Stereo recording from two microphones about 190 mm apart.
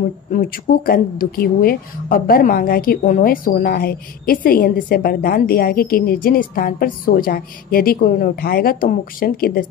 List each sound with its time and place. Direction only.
0.3 s speech: 50° left (ahead or behind)